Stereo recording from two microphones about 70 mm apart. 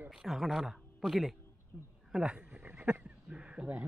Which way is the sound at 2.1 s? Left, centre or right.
Centre.